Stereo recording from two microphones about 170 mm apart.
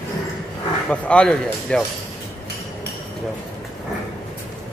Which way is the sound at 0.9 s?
5° left (ahead or behind).